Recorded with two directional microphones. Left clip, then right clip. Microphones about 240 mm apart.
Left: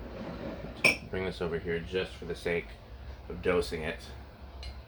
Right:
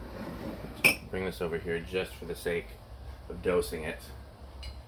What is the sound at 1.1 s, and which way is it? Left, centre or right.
Speech, centre.